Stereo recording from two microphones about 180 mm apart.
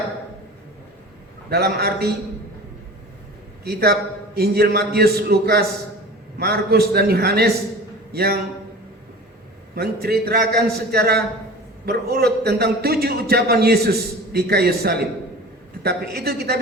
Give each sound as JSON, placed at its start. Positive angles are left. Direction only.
{"t": 1.5, "sound": "a man's voice", "side_deg": -60}
{"t": 3.6, "sound": "a man's voice", "side_deg": -60}
{"t": 9.7, "sound": "a man's voice", "side_deg": -60}